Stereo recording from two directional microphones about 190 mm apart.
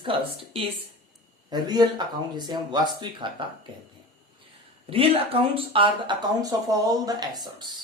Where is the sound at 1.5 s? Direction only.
20° right (ahead or behind).